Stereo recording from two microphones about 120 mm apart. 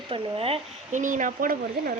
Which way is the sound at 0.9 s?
90° right.